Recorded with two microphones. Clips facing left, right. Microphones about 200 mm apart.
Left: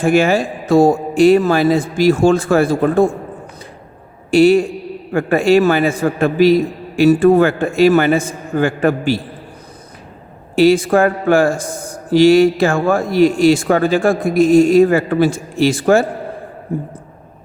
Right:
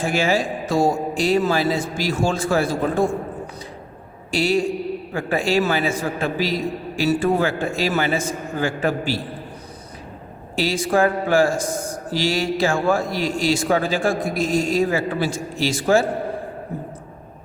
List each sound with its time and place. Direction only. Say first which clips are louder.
0.0 s a man's voice: left 7 dB; 55° left (ahead or behind)
4.3 s a man's voice: left 9 dB; 55° left (ahead or behind)
10.5 s a man's voice: left 9 dB; 55° left (ahead or behind)